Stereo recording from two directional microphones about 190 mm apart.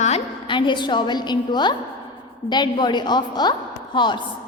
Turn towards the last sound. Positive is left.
turn(degrees=25)  # may be behind; listen again after turning